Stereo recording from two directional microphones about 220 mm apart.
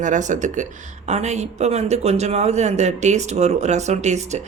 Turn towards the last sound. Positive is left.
turn(degrees=-30)  # may be behind; listen again after turning